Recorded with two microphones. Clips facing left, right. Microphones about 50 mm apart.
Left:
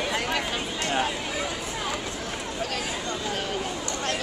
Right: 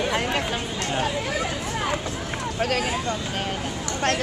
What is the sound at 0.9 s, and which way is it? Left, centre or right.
Speech, centre.